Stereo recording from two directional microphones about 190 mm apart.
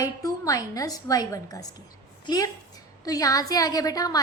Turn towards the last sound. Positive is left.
turn(degrees=20)  # may be behind; listen again after turning